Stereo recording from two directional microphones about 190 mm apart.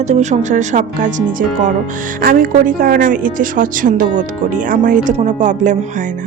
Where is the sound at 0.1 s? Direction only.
40° right (ahead or behind).